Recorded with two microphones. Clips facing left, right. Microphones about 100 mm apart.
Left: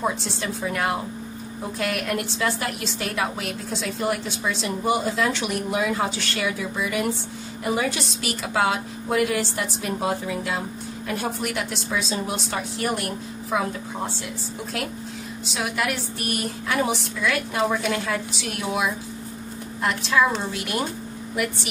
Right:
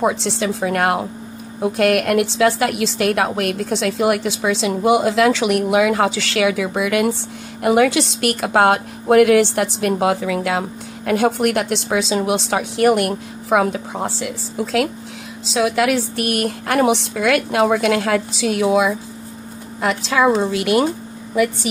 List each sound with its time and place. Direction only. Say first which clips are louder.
0.0 s a woman's voice: right 7 dB; 85° right
11.1 s a woman's voice: right 11 dB; 75° right (ahead or behind); by 18.2 s 90° right
19.8 s a woman's voice: right 4 dB; 90° right